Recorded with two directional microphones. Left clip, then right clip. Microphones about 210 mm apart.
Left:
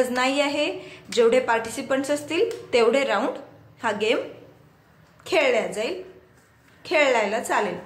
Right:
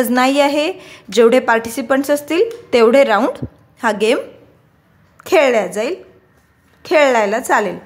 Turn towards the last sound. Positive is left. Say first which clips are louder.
# right 8 dB
turn(degrees=-45)  # may be behind; listen again after turning